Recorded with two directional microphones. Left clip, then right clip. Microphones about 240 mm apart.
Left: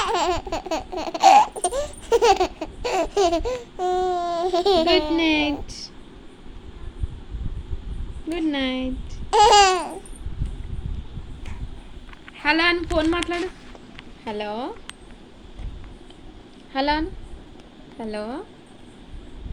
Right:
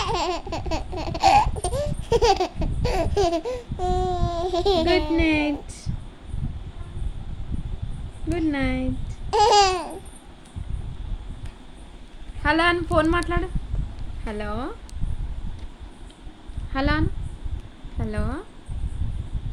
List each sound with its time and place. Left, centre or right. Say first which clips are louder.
0.0 s laughter: left 3 dB; centre
3.4 s a sound: left 2 dB; centre
5.1 s a woman's voice: left 1 dB; centre
8.3 s a sound: left 1 dB; centre
9.3 s babbling: left 3 dB; centre
12.4 s a woman's voice: left 1 dB; right
14.3 s speech: left 2 dB; right
16.7 s speech: left 2 dB; right